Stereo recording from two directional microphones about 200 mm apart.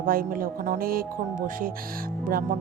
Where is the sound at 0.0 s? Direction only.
45° right (ahead or behind).